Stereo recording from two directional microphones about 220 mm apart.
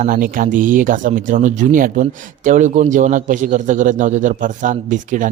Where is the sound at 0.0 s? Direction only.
40° right (ahead or behind).